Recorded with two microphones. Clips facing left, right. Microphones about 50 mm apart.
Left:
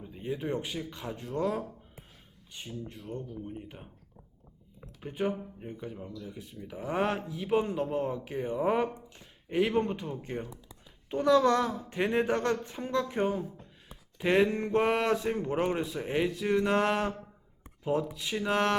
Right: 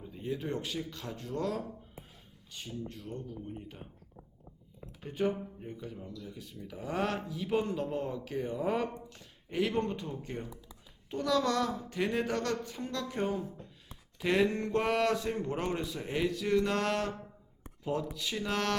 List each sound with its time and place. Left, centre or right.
0.0 s speech: centre
5.0 s speech: centre